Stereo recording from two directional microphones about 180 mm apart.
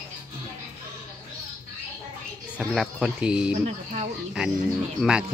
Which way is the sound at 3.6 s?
40° right (ahead or behind).